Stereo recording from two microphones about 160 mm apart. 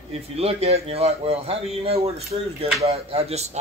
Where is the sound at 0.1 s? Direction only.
40° right (ahead or behind).